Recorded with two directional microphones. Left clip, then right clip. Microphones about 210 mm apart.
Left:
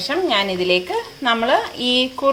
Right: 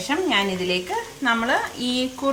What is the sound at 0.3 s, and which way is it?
Speech, 40° left (ahead or behind).